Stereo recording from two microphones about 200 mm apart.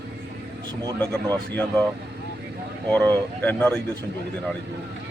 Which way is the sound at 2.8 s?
5° left (ahead or behind).